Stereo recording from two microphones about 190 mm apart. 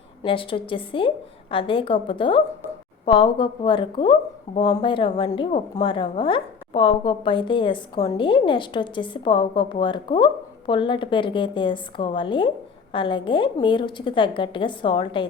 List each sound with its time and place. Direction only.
0.2 s a woman's voice: 25° left (ahead or behind)